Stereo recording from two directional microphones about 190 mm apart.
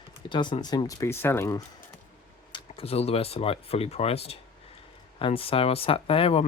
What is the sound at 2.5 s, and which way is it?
Speech, 30° left (ahead or behind).